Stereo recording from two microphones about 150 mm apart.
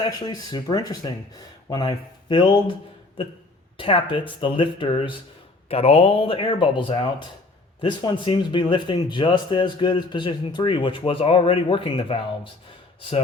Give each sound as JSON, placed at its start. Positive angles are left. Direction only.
{"t": 0.0, "sound": "speech", "side_deg": 25}
{"t": 3.8, "sound": "speech", "side_deg": 35}